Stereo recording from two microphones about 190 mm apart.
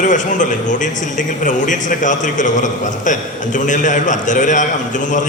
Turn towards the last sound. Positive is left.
turn(degrees=40)  # may be behind; listen again after turning